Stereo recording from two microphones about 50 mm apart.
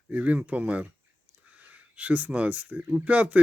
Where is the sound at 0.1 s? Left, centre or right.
Right.